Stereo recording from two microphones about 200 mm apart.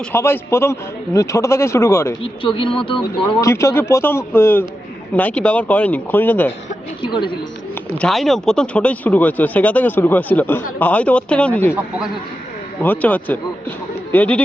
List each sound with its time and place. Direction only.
0.1 s speech: 10° left (ahead or behind)
2.2 s speech: 25° left (ahead or behind)
3.4 s speech: 15° left (ahead or behind)
7.0 s speech: 25° left (ahead or behind)
7.9 s speech: centre (ahead or behind)
12.8 s speech: 10° left (ahead or behind)